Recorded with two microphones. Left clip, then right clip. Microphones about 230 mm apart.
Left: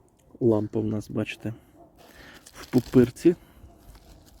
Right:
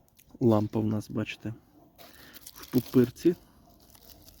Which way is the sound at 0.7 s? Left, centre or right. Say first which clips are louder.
Left 2 dB; centre.